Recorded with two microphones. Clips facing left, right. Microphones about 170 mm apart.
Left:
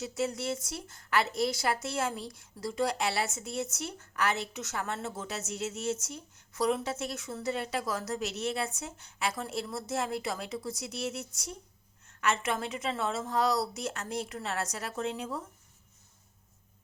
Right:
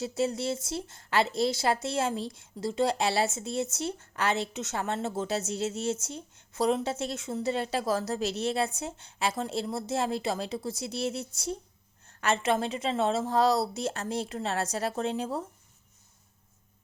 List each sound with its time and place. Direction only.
0.0 s speech: 30° right (ahead or behind)